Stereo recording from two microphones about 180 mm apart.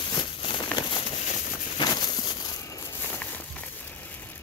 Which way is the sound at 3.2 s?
10° left (ahead or behind).